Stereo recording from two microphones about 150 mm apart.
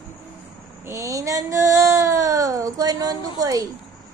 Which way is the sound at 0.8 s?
20° right (ahead or behind).